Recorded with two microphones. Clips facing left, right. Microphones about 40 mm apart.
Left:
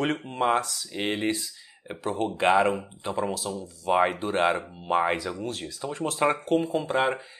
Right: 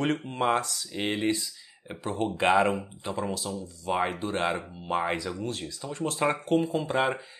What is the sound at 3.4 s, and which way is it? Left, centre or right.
Speech, centre.